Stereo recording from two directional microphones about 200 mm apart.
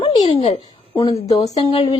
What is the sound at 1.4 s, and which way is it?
Speech, 30° left (ahead or behind).